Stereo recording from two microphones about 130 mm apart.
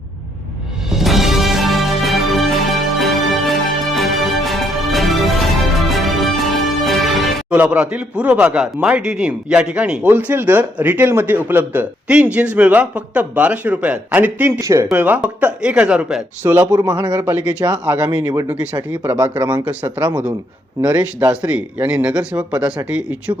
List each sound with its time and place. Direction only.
0.9 s music: centre (ahead or behind)
7.5 s a man's voice: 10° right (ahead or behind)
14.6 s speech: 25° right (ahead or behind)
14.9 s a man's voice: 10° right (ahead or behind)
16.7 s speech: 30° right (ahead or behind)
17.1 s speech: 20° right (ahead or behind)
19.1 s a man's voice: 15° right (ahead or behind)
20.8 s a man's voice: 10° right (ahead or behind)